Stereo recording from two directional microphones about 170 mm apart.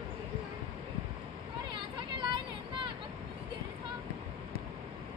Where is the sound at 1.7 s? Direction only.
25° right (ahead or behind).